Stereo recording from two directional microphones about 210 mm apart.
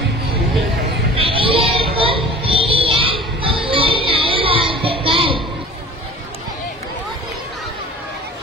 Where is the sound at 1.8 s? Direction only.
25° right (ahead or behind).